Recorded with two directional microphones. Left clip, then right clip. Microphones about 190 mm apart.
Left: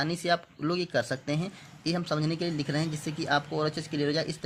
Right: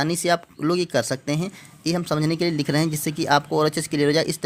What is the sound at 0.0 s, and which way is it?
Speech, 40° right (ahead or behind).